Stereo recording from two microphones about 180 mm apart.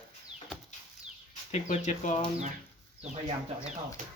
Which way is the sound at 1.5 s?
40° left (ahead or behind).